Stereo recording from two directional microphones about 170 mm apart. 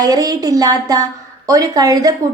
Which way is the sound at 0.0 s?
20° right (ahead or behind).